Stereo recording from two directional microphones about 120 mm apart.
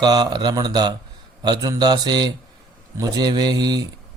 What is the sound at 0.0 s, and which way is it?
Speech, 35° right (ahead or behind).